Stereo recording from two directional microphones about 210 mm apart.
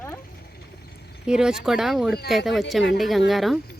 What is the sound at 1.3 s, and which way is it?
Speech, 5° right (ahead or behind).